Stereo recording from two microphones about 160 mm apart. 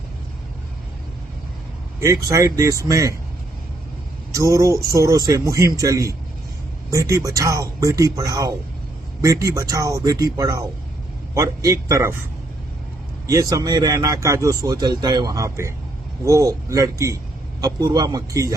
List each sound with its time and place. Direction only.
2.0 s speech: 20° right (ahead or behind)
4.4 s speech: 20° right (ahead or behind)
13.2 s speech: 20° right (ahead or behind)